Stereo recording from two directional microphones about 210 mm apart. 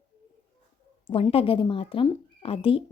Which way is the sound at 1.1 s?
25° left (ahead or behind).